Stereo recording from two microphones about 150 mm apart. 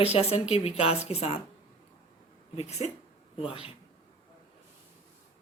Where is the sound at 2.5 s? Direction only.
45° left (ahead or behind).